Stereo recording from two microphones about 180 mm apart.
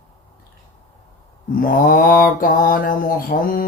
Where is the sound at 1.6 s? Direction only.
50° left (ahead or behind).